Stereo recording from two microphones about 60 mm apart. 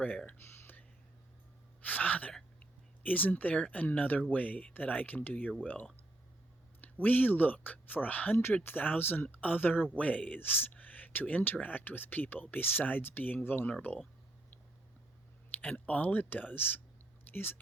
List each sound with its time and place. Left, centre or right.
0.3 s a sound: left
1.8 s speech: left
2.6 s a sound: left
3.5 s speech: left
7.0 s speech: left
15.6 s speech: left